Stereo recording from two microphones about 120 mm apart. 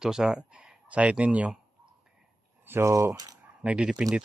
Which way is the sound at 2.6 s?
20° right (ahead or behind).